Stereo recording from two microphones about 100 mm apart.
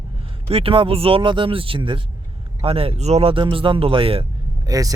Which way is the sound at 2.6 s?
70° right (ahead or behind).